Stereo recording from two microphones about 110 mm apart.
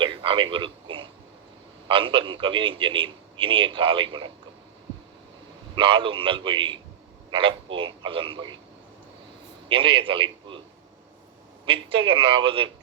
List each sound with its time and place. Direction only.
0.0 s a sound: 50° right (ahead or behind)
1.9 s a man's voice: 50° right (ahead or behind)
5.7 s a man's voice: 50° right (ahead or behind)
9.6 s a man's voice: 50° right (ahead or behind)
11.6 s a man's voice: 50° right (ahead or behind)